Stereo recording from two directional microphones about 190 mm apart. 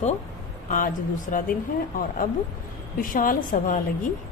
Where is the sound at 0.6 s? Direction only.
45° left (ahead or behind).